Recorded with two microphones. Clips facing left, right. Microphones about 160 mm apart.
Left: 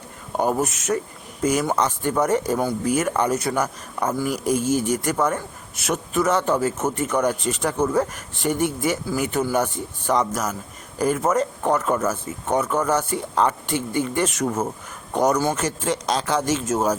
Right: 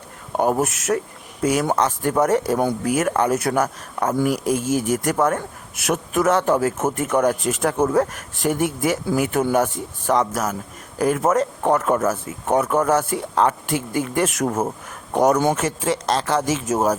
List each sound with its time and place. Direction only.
0.3 s speech: centre (ahead or behind)
14.4 s speech: 25° right (ahead or behind)
15.1 s speech: centre (ahead or behind)